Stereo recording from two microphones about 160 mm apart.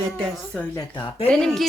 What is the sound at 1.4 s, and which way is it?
Speech, centre (ahead or behind).